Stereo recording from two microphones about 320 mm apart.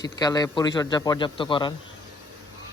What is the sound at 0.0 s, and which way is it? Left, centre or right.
Speech, centre.